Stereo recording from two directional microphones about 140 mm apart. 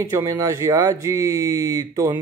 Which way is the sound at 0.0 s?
20° right (ahead or behind).